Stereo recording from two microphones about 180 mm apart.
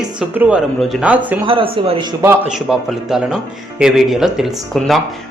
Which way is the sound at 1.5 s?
30° right (ahead or behind).